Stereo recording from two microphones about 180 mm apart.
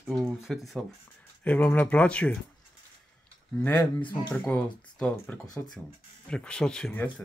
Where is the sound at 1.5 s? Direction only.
10° left (ahead or behind).